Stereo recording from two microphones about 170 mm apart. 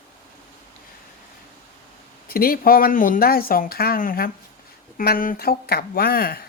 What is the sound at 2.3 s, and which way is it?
A woman's voice, 60° left (ahead or behind).